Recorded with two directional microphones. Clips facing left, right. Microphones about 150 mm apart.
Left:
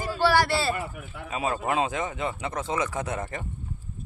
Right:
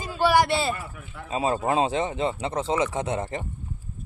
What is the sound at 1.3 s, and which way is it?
A man's voice, 30° right (ahead or behind).